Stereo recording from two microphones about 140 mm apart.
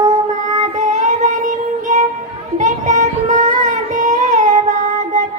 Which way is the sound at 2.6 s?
60° right (ahead or behind).